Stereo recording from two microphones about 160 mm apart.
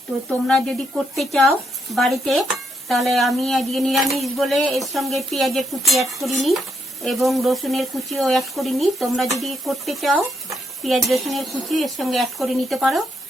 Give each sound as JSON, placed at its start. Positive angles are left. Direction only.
{"t": 0.4, "sound": "speech", "side_deg": 5}